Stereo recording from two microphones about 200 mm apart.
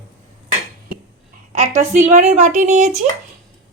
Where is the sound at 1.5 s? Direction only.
35° right (ahead or behind).